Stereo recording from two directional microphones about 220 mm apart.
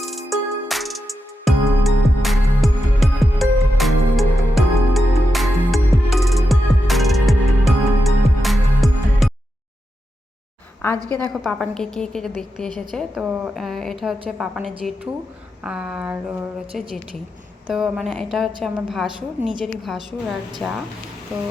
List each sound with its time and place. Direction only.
0.0 s music: centre (ahead or behind)
11.0 s a woman's voice: 15° right (ahead or behind)
11.3 s a woman's voice: centre (ahead or behind)
17.7 s a woman's voice: 5° right (ahead or behind)